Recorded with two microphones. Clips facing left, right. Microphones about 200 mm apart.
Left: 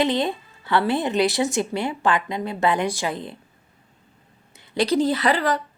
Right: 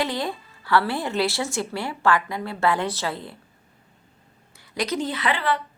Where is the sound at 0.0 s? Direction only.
20° left (ahead or behind).